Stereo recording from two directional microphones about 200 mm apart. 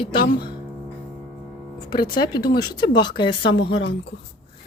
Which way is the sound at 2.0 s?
20° left (ahead or behind).